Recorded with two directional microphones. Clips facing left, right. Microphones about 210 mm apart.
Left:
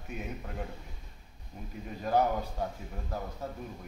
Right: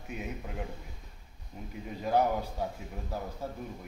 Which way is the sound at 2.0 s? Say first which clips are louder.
Even; 5° right (ahead or behind).